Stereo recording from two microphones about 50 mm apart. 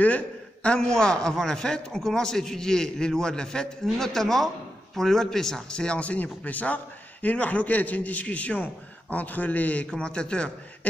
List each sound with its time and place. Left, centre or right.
0.0 s a man's voice: left
9.8 s a man's voice: centre